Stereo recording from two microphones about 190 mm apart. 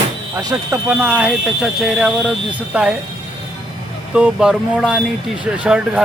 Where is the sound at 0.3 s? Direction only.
15° right (ahead or behind).